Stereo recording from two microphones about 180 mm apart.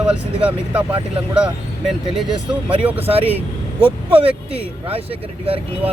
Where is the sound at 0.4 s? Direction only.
5° right (ahead or behind).